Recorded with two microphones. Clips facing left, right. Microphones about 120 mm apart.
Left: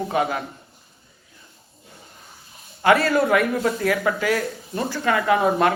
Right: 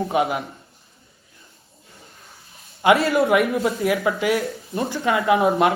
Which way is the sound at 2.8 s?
20° right (ahead or behind).